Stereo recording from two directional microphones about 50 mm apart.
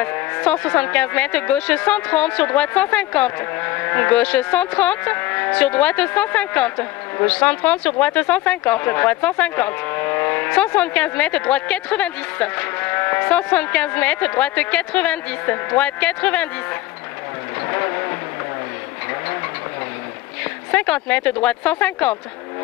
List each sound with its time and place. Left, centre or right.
0.0 s speech: left
3.6 s vehicle: left
4.1 s speech: left
5.1 s vehicle: left
5.6 s speech: left
13.3 s speech: left
17.6 s vehicle: left
20.7 s speech: left